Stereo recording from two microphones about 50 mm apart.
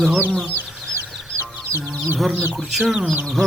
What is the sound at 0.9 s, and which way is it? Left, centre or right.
Chicken, right.